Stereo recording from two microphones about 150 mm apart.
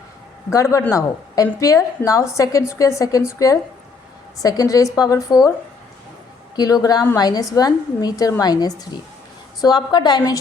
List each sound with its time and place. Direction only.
0.5 s a woman's voice: 20° left (ahead or behind)
6.6 s a woman's voice: 25° left (ahead or behind)